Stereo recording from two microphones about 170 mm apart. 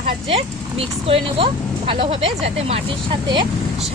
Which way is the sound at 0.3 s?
35° right (ahead or behind).